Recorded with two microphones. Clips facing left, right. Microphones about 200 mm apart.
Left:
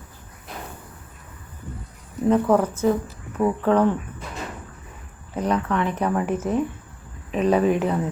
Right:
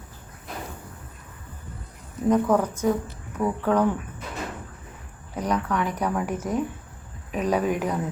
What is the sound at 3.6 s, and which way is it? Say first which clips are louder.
Speech: left 3 dB; 10° right (ahead or behind).